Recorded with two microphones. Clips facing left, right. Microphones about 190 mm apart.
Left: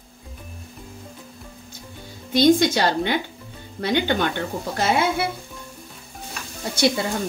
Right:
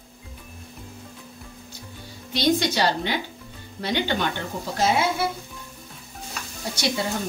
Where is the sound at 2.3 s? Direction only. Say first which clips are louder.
Left 6 dB; 50° left (ahead or behind).